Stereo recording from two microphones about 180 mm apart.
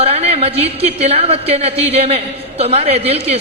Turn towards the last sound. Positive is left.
turn(degrees=-35)  # may be behind; listen again after turning